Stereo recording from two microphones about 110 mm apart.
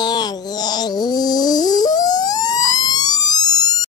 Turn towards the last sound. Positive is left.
turn(degrees=35)  # may be behind; listen again after turning